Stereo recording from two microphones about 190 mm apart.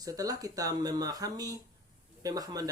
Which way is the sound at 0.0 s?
20° right (ahead or behind).